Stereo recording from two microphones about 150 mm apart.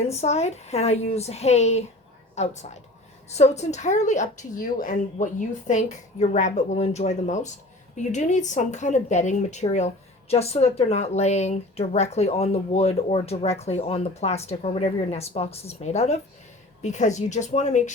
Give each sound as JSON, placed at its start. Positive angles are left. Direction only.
{"t": 0.0, "sound": "speech", "side_deg": 45}